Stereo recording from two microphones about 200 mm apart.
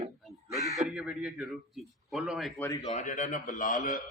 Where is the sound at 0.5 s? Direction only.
5° right (ahead or behind).